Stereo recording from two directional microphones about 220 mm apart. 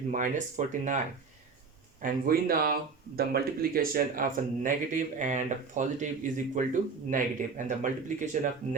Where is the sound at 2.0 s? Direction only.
40° right (ahead or behind).